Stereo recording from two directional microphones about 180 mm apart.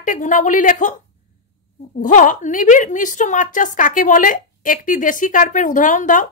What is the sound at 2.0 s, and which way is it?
A woman's voice, 45° left (ahead or behind).